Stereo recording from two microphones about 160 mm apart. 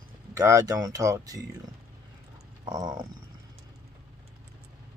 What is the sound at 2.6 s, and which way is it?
Speech, 25° right (ahead or behind).